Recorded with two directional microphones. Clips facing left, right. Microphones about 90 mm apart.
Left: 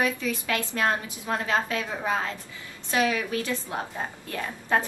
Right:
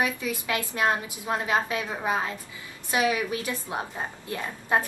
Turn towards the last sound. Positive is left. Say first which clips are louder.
# even
turn(degrees=-15)  # may be behind; listen again after turning